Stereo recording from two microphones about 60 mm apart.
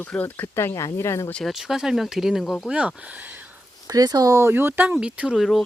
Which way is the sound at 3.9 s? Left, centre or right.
Right.